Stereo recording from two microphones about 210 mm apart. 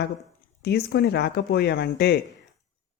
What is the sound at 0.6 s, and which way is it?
Speech, 50° left (ahead or behind).